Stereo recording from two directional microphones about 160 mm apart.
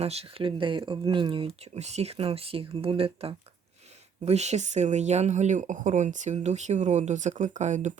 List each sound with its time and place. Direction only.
0.0 s speech: 40° right (ahead or behind)